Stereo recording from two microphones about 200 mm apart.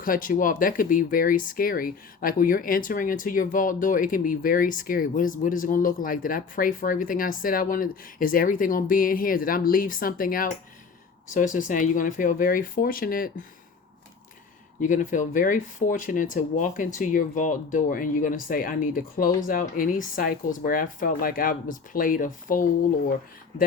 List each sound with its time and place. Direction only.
0.0 s speech: 45° left (ahead or behind)
14.8 s speech: 40° left (ahead or behind)